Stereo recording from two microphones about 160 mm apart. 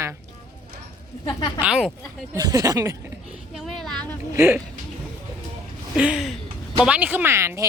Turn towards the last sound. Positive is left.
turn(degrees=-15)  # may be behind; listen again after turning